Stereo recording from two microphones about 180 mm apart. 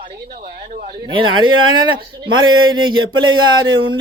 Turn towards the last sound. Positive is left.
turn(degrees=-25)  # may be behind; listen again after turning